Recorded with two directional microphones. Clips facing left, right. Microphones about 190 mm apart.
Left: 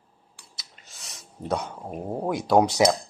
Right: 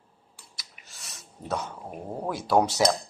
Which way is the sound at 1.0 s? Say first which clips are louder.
Left 5 dB; 15° left (ahead or behind).